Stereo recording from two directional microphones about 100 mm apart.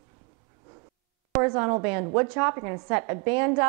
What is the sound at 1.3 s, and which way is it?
A woman's voice, 20° right (ahead or behind).